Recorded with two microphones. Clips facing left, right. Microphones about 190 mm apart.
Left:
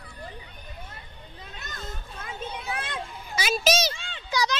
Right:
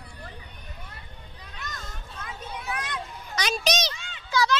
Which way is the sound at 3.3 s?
5° left (ahead or behind).